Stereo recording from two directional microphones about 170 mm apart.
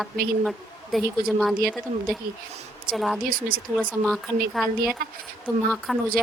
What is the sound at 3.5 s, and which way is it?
Speech, 55° right (ahead or behind).